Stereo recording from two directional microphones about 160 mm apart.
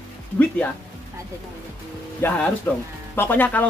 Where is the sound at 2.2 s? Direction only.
10° left (ahead or behind).